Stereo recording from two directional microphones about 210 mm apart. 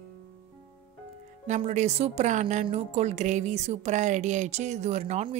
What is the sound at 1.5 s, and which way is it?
A woman's voice, 35° right (ahead or behind).